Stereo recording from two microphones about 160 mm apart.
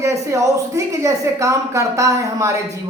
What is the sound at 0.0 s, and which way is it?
A woman's voice, 20° right (ahead or behind).